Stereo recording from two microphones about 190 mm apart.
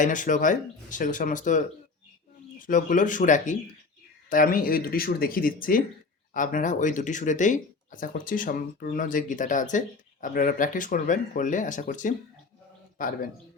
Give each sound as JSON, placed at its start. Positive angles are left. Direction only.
{"t": 0.0, "sound": "speech", "side_deg": 40}